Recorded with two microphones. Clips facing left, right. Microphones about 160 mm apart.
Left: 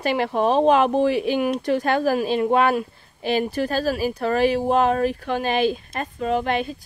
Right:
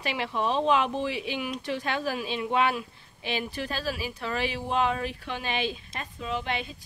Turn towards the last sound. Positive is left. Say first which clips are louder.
# left 9 dB
turn(degrees=50)  # may be behind; listen again after turning